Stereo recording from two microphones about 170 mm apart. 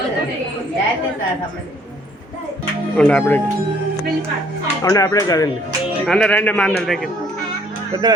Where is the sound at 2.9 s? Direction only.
10° left (ahead or behind).